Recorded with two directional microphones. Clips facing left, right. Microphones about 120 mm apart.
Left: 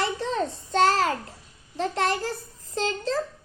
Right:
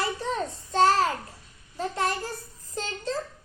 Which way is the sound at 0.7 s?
90° left.